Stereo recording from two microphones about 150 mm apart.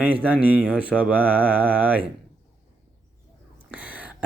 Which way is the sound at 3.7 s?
10° right (ahead or behind).